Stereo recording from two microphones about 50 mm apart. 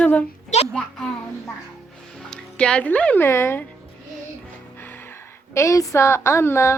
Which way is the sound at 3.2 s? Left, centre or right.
Left.